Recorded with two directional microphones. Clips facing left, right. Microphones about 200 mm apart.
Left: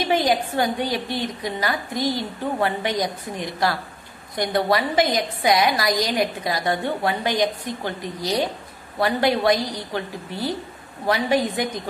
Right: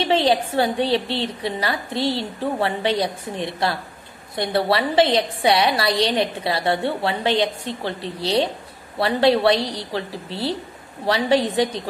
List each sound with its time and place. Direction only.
0.0 s a woman's voice: 30° right (ahead or behind)